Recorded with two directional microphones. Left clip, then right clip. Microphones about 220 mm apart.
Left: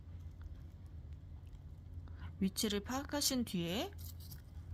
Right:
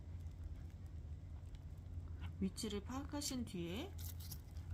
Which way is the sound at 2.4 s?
45° left (ahead or behind).